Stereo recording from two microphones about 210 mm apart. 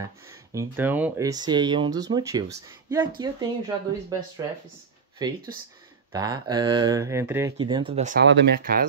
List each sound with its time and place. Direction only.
0.3 s speech: 15° right (ahead or behind)
5.2 s speech: 20° right (ahead or behind)
7.5 s speech: 20° right (ahead or behind)
8.2 s speech: 55° right (ahead or behind)